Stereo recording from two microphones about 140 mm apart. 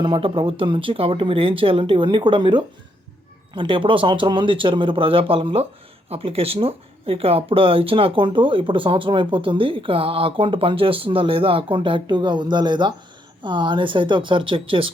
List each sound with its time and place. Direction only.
0.0 s speech: 40° right (ahead or behind)